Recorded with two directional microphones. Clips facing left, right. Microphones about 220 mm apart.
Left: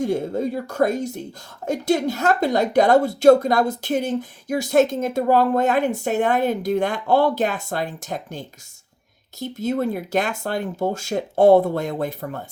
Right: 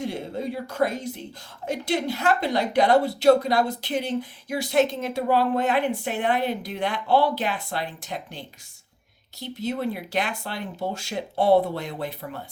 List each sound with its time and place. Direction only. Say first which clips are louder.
0.0 s a woman's voice: left 7 dB; 45° left (ahead or behind)